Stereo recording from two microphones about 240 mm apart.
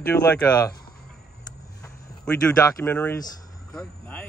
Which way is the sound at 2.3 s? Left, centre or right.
Centre.